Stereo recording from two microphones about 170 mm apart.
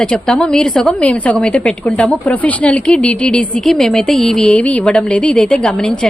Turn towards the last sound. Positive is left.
turn(degrees=5)  # may be behind; listen again after turning